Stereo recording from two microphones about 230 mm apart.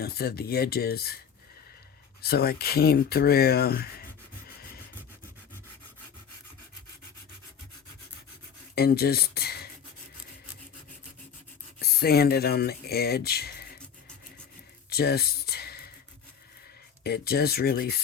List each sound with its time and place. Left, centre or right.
0.0 s speech: left
2.2 s speech: left
8.7 s speech: left
11.8 s speech: left
14.8 s a sound: left
17.0 s speech: left